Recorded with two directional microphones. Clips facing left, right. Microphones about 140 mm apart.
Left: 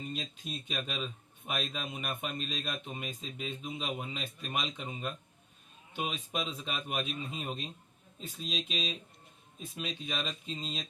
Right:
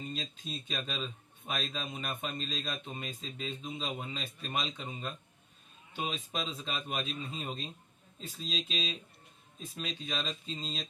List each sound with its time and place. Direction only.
0.2 s a man's voice: 5° left (ahead or behind)